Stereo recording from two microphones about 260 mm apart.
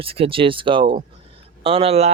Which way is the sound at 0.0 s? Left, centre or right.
Right.